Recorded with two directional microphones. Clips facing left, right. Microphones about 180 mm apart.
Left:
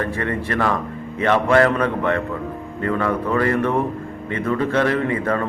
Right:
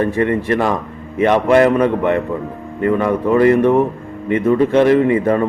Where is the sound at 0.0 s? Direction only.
15° right (ahead or behind).